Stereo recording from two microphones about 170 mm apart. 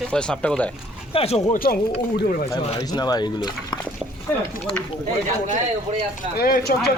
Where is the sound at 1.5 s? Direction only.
60° left (ahead or behind).